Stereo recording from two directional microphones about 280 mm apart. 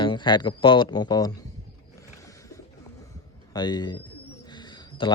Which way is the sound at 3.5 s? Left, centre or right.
Centre.